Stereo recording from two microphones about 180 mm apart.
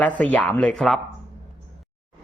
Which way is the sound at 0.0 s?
10° left (ahead or behind).